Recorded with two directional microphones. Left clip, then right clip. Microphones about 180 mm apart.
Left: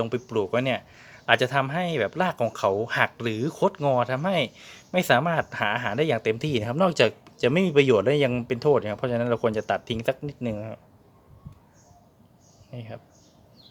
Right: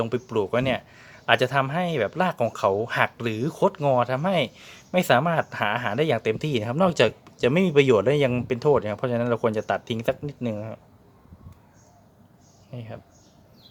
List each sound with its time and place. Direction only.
0.0 s speech: centre (ahead or behind)
12.7 s speech: 5° left (ahead or behind)